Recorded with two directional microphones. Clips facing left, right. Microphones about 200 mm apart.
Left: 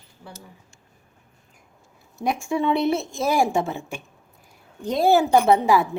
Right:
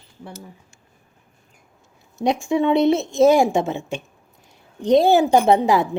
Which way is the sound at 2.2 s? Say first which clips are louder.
Right 4 dB; 20° right (ahead or behind).